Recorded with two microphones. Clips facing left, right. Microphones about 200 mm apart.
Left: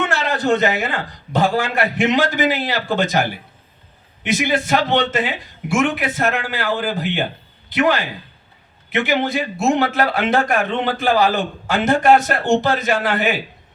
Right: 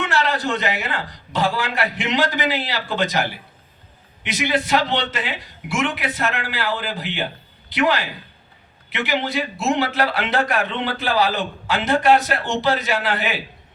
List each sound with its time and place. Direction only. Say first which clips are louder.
0.0 s a man's voice: left 2 dB; 50° left (ahead or behind)